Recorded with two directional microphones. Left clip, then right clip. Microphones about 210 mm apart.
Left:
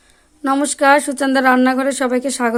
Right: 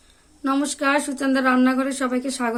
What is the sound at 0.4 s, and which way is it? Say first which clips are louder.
A woman's voice: left 8 dB; 35° left (ahead or behind).